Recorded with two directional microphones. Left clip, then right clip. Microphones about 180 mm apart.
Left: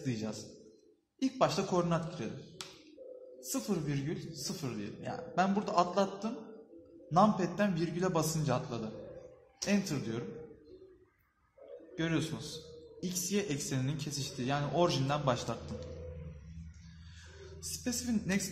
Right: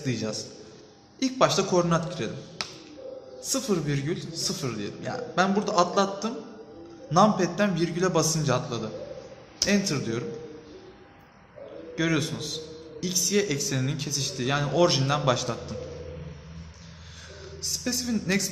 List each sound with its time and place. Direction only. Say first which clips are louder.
0.0 s speech: right 9 dB; 10° left (ahead or behind)
3.5 s speech: right 9 dB; 10° left (ahead or behind)
11.9 s speech: right 8 dB; 15° left (ahead or behind)
17.6 s a woman's voice: right 10 dB; 20° left (ahead or behind)